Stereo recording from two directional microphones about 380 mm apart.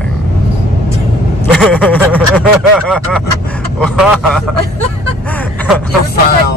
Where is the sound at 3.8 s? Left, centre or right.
Centre.